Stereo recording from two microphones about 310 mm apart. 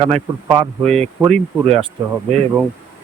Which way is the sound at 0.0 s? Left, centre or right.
Centre.